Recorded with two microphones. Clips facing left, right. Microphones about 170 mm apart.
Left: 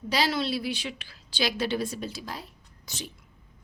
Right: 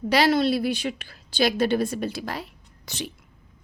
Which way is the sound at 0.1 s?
55° right (ahead or behind).